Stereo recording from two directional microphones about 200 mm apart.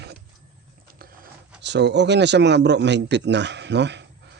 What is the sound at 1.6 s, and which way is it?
Speech, 60° right (ahead or behind).